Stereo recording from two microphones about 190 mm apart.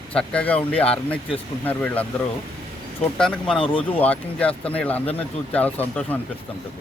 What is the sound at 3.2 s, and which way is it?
Speech, 5° left (ahead or behind).